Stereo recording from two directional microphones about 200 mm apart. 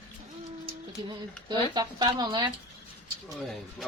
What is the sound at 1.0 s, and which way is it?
Speech, 20° right (ahead or behind).